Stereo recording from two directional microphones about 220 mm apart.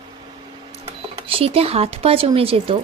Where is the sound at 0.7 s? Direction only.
25° right (ahead or behind).